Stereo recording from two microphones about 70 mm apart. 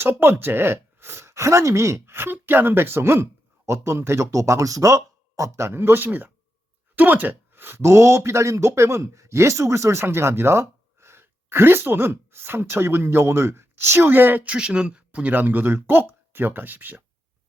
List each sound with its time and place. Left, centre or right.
0.0 s speech: right